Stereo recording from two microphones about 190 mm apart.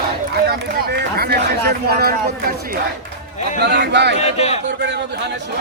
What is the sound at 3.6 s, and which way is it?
Speech, 65° right (ahead or behind).